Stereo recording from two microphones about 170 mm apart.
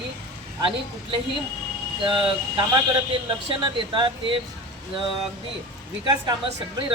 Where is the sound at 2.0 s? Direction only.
30° right (ahead or behind).